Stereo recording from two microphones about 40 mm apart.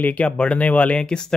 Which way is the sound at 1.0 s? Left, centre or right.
Centre.